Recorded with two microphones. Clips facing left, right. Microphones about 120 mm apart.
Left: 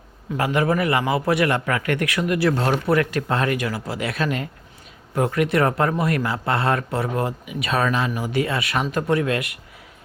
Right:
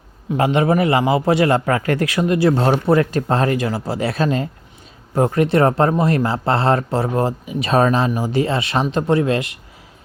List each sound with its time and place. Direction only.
0.3 s speech: 25° right (ahead or behind)